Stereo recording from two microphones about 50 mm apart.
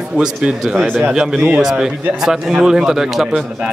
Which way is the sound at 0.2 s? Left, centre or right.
Centre.